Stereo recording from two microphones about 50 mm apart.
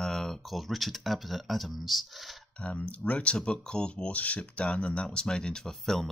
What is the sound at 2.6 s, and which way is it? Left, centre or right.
Speech, left.